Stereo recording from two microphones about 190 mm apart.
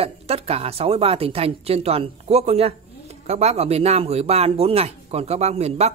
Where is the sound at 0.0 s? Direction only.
30° right (ahead or behind).